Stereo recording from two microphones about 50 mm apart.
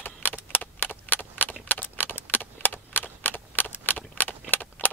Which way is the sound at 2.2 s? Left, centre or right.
Left.